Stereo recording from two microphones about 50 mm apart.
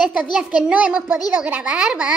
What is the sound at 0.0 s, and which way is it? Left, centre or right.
A child's voice, right.